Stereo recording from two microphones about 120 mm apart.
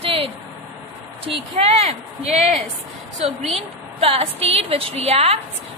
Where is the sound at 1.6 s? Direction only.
60° right (ahead or behind).